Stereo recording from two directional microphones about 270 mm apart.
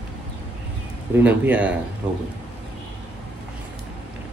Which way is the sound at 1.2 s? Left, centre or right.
Centre.